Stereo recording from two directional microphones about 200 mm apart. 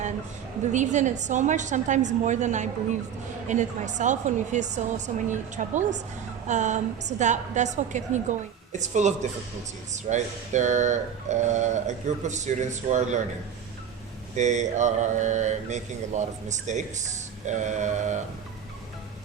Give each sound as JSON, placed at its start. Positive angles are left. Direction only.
{"t": 0.7, "sound": "mantra", "side_deg": -35}
{"t": 14.3, "sound": "mantra", "side_deg": -35}